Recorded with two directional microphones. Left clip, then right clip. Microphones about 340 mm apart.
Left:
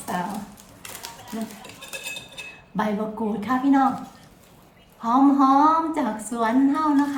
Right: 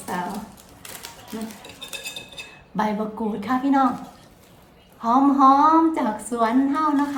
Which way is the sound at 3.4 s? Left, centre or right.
Centre.